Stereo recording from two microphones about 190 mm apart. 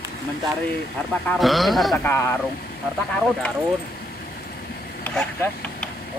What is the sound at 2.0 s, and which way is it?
Speech, 15° left (ahead or behind).